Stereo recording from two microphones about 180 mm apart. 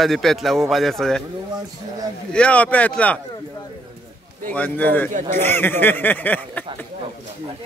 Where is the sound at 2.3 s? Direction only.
5° left (ahead or behind).